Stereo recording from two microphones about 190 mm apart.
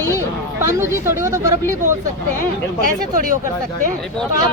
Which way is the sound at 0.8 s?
15° right (ahead or behind).